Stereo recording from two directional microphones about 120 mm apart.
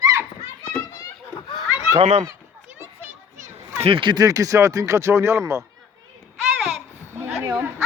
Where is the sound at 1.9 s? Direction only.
65° right (ahead or behind).